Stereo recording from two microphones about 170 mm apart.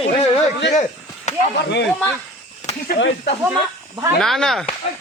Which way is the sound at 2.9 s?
90° left.